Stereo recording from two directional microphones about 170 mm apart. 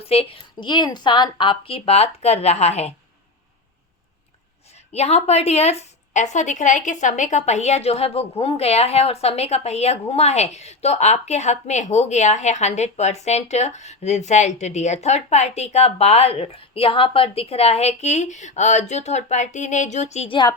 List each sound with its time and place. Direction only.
0.0 s a woman's voice: 35° left (ahead or behind)
4.9 s a woman's voice: 40° left (ahead or behind)